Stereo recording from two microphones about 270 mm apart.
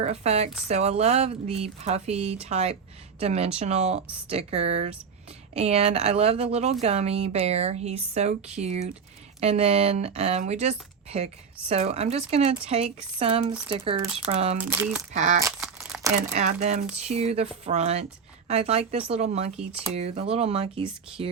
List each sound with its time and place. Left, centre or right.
0.0 s speech: right
14.6 s speech: centre
15.1 s speech: right
15.4 s crumpling: centre
16.3 s speech: right
19.5 s speech: centre
19.9 s speech: right